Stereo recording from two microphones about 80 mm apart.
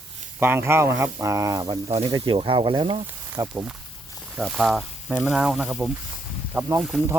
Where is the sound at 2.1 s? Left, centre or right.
Right.